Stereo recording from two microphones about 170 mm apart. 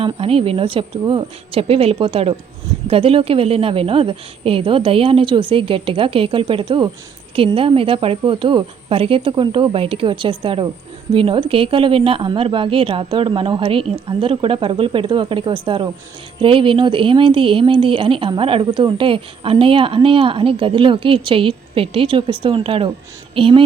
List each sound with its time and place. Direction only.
0.0 s speech: 35° right (ahead or behind)